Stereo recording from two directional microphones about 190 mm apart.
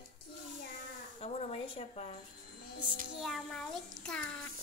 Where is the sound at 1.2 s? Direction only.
30° left (ahead or behind).